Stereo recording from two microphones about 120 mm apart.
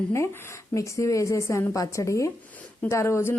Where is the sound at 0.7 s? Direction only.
25° left (ahead or behind).